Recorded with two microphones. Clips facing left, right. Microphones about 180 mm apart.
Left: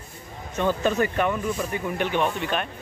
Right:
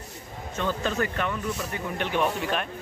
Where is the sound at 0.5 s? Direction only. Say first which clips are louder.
Left 5 dB; 15° left (ahead or behind).